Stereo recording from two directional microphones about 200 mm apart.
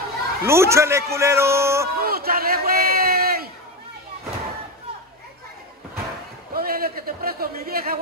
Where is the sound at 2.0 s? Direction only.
50° right (ahead or behind).